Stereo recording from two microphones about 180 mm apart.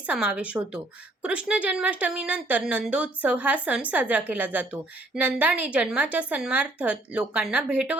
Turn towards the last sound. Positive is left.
turn(degrees=-10)  # may be behind; listen again after turning